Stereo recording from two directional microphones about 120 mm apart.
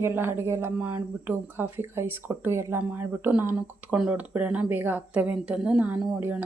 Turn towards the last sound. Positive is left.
turn(degrees=-15)  # may be behind; listen again after turning